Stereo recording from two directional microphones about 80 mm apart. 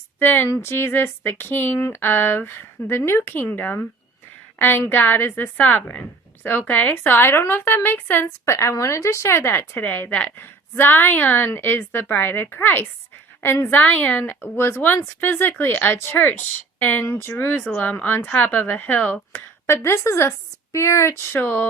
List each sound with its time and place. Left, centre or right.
0.2 s a woman's voice: left
19.3 s a woman's voice: left
21.4 s a woman's voice: left